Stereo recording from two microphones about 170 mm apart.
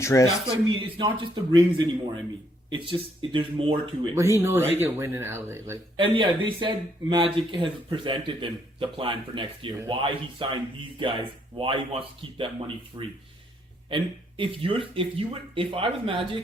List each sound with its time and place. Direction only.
0.0 s speech: 15° left (ahead or behind)
0.8 s speech: 30° right (ahead or behind)
4.1 s speech: 15° right (ahead or behind)
6.0 s speech: 30° right (ahead or behind)